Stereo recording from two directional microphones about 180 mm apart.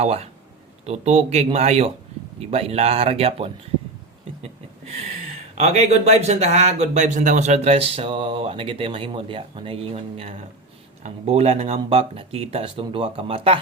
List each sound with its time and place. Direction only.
0.0 s speech: 35° right (ahead or behind)
5.5 s speech: 40° right (ahead or behind)